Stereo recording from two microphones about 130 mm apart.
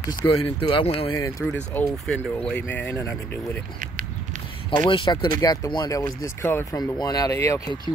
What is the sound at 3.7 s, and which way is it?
Walk, 90° right.